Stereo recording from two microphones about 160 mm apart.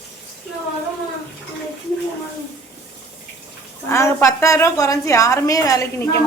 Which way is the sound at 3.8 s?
15° left (ahead or behind).